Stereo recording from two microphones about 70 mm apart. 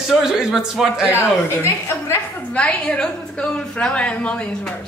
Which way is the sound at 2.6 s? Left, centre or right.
Centre.